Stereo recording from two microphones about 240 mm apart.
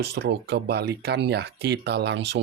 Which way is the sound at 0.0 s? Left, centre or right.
Right.